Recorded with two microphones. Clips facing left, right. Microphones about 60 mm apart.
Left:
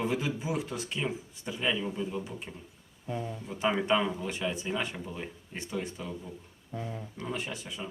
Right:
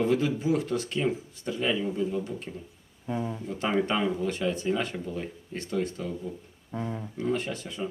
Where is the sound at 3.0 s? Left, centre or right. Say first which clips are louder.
Right 4 dB; centre.